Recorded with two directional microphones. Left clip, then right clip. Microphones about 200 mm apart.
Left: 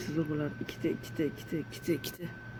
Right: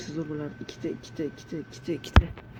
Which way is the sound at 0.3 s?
15° left (ahead or behind).